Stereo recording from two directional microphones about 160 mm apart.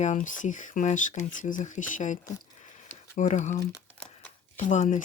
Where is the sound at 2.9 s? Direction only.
50° left (ahead or behind).